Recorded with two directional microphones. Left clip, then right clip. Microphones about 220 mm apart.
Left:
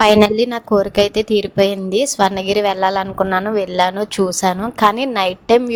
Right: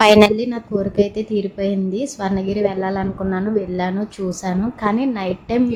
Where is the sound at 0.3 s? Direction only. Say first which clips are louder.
Left 7 dB; 40° left (ahead or behind).